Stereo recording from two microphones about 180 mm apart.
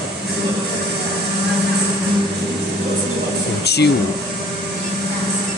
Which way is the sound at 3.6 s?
65° left (ahead or behind).